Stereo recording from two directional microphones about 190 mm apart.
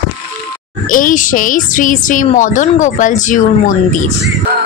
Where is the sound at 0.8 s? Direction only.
45° left (ahead or behind).